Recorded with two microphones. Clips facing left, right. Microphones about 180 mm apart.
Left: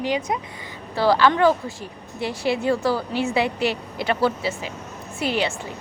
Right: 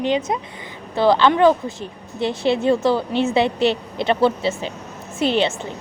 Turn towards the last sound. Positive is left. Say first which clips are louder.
# right 5 dB
turn(degrees=-25)  # may be behind; listen again after turning